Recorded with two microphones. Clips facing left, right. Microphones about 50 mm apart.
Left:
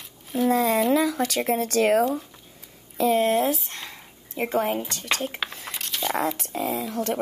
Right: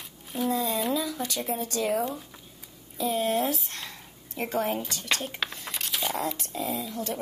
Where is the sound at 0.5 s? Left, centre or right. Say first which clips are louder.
Left 7 dB; left.